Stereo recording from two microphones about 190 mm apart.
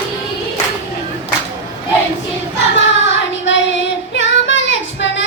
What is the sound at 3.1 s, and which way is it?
Child singing, 75° left (ahead or behind).